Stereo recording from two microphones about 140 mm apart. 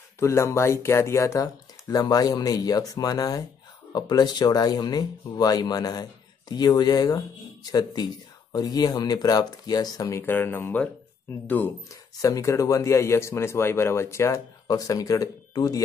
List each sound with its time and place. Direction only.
0.2 s speech: 20° left (ahead or behind)